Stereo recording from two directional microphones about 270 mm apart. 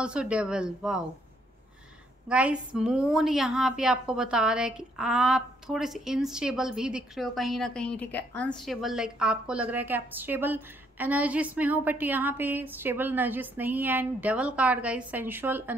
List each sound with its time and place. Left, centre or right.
0.0 s a woman's voice: centre
2.2 s a woman's voice: centre